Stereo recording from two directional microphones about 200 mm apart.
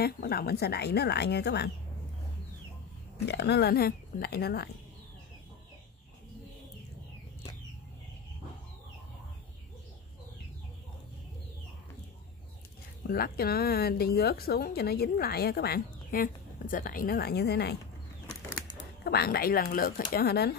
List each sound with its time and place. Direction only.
0.0 s speech: 50° left (ahead or behind)
3.3 s speech: 55° left (ahead or behind)
13.0 s speech: 50° left (ahead or behind)
19.0 s speech: 50° left (ahead or behind)